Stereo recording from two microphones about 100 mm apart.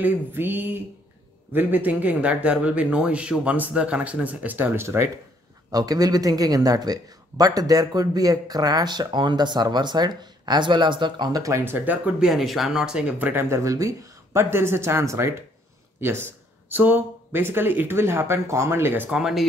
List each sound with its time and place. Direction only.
0.0 s speech: 20° right (ahead or behind)
5.7 s speech: 40° right (ahead or behind)
11.6 s speech: 20° right (ahead or behind)
12.2 s speech: centre (ahead or behind); by 19.1 s 20° right (ahead or behind)
19.1 s speech: 5° right (ahead or behind)